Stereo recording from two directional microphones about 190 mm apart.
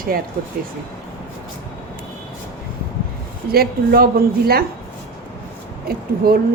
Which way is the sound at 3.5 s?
55° right (ahead or behind).